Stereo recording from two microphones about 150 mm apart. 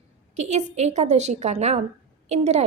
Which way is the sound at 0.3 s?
50° right (ahead or behind).